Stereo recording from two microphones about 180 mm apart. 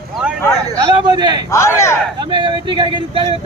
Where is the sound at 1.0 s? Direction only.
25° right (ahead or behind).